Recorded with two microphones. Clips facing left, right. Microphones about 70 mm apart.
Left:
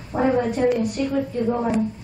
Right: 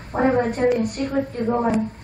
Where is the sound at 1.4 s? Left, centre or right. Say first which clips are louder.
Right 3 dB; right.